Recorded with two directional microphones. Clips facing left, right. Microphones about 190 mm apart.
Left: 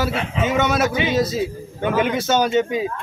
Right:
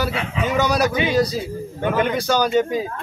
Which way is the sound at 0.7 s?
Centre (ahead or behind).